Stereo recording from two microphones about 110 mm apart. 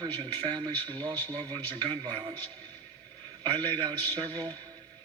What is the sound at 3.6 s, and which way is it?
Speech, 45° right (ahead or behind).